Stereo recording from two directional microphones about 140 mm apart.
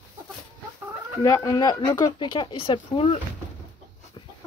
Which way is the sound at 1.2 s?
25° left (ahead or behind).